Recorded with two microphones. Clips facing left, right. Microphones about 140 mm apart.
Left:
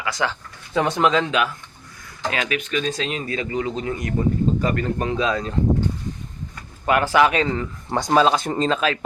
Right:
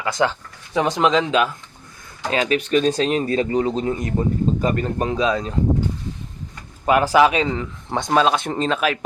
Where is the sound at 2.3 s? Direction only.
30° right (ahead or behind); by 5.8 s 15° right (ahead or behind).